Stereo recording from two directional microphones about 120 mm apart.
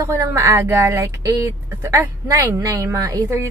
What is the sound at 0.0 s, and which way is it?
A woman's voice, 25° right (ahead or behind).